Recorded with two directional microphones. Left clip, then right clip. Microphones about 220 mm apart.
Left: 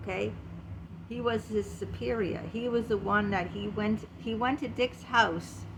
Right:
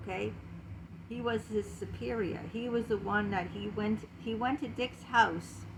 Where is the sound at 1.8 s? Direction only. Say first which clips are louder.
Left 4 dB; 20° left (ahead or behind).